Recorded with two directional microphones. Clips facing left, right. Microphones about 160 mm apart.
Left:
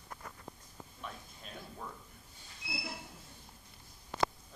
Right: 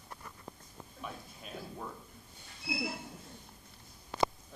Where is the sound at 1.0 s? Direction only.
5° right (ahead or behind).